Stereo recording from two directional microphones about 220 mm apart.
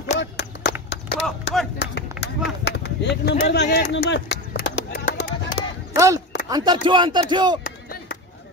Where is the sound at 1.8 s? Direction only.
50° left (ahead or behind).